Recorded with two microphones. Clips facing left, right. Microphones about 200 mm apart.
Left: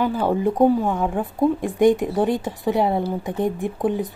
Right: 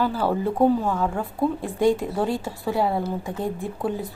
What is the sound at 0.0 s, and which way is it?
A woman's voice, 15° left (ahead or behind).